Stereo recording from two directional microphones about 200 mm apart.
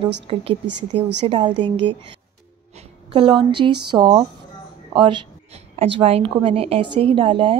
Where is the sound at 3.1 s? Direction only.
25° right (ahead or behind).